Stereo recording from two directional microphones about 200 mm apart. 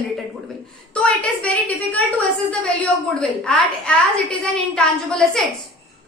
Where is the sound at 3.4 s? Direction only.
5° left (ahead or behind).